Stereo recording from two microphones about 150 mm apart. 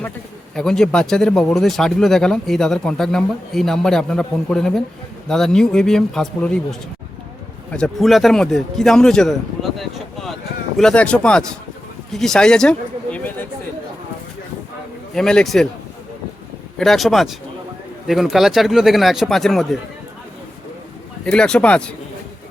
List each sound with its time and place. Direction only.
0.5 s speech: 5° left (ahead or behind)
9.7 s boat: centre (ahead or behind)
10.8 s speech: 5° left (ahead or behind)
15.1 s speech: 5° left (ahead or behind)
16.7 s speech: centre (ahead or behind)
21.2 s speech: 5° left (ahead or behind)